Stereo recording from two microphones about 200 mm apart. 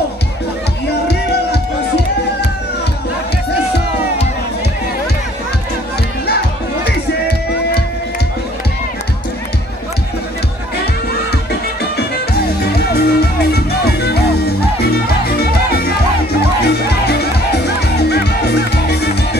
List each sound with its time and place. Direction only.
1.0 s music: 55° left (ahead or behind)
6.2 s music: 55° left (ahead or behind)
12.6 s music: 55° left (ahead or behind)